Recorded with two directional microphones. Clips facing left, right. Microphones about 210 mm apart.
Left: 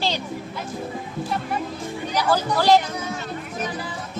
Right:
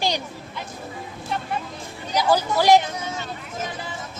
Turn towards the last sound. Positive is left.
turn(degrees=-20)  # may be behind; listen again after turning